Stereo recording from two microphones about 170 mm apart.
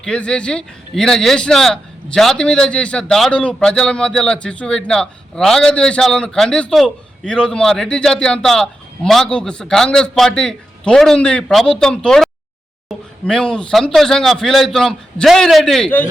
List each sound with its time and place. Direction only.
0.0 s speech: 5° left (ahead or behind)